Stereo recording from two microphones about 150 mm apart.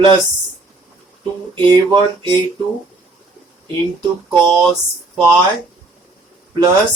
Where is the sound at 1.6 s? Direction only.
30° right (ahead or behind).